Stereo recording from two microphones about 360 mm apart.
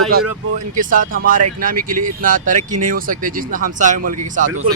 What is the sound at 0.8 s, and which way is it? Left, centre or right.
Speech, right.